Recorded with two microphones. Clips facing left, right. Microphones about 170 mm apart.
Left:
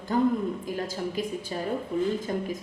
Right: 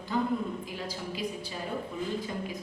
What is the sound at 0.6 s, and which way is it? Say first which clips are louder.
Speech: left 6 dB; 45° left (ahead or behind).